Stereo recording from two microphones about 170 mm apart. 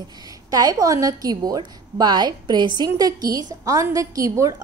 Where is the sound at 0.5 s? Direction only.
20° right (ahead or behind).